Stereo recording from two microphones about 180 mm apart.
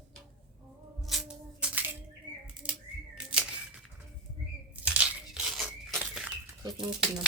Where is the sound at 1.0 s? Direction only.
5° right (ahead or behind).